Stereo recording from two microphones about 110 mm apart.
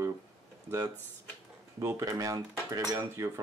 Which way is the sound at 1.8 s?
30° right (ahead or behind).